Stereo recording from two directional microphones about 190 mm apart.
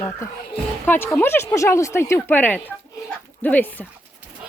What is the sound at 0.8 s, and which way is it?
Speech, 10° left (ahead or behind).